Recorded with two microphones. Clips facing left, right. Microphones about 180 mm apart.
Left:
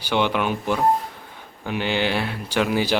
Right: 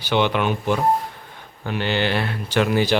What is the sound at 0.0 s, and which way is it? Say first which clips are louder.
Speech: right 2 dB; 10° left (ahead or behind).